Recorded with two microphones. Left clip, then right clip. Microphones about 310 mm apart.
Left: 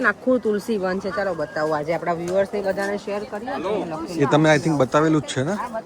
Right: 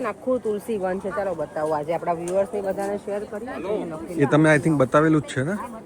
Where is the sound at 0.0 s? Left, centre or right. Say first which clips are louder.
Left 5 dB; left.